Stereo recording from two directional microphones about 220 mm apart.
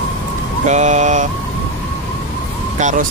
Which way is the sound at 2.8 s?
35° right (ahead or behind).